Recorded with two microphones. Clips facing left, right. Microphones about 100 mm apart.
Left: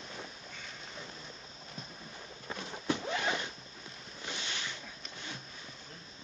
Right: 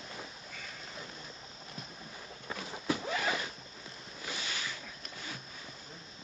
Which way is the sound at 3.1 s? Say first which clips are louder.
Even; 25° left (ahead or behind).